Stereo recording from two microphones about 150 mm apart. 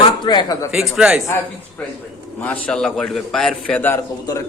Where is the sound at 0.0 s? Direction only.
30° left (ahead or behind).